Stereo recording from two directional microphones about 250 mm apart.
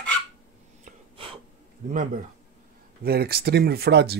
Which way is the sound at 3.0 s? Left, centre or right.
Right.